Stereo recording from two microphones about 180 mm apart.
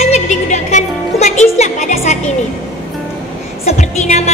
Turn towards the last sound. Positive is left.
turn(degrees=40)  # may be behind; listen again after turning